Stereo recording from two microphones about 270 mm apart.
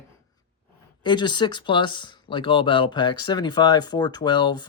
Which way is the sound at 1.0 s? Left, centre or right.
Centre.